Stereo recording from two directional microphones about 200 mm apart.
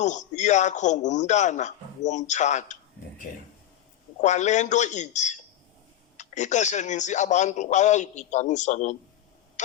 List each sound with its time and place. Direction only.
0.0 s speech: 35° left (ahead or behind)
4.2 s speech: 35° left (ahead or behind)
9.6 s tick-tock: 35° left (ahead or behind)